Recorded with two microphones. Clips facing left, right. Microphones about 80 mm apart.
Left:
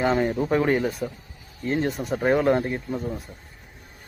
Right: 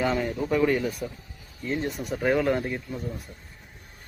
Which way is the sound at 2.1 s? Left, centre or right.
Left.